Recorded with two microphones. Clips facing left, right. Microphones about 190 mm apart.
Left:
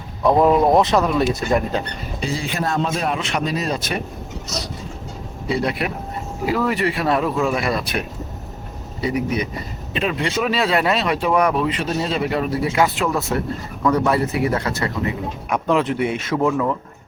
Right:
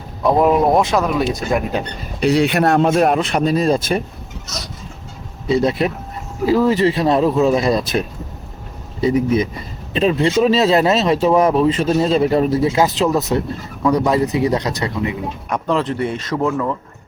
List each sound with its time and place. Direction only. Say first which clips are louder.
0.2 s speech: right 1 dB; centre (ahead or behind)
2.2 s a man's voice: right 10 dB; 70° right (ahead or behind); by 3.2 s 50° right (ahead or behind)
3.6 s speech: right 7 dB; 30° right (ahead or behind)
5.6 s speech: right 5 dB; 25° right (ahead or behind)
12.6 s speech: right 4 dB; 20° right (ahead or behind)
15.4 s speech: left 1 dB; 5° left (ahead or behind)